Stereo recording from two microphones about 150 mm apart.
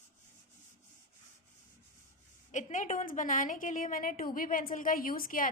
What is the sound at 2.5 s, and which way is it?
A woman's voice, 55° left (ahead or behind).